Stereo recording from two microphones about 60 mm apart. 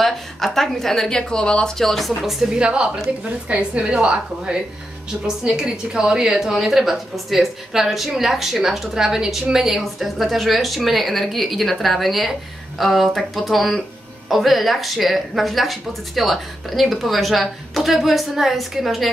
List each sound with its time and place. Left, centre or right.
0.0 s a woman's voice: centre
2.6 s a woman's voice: centre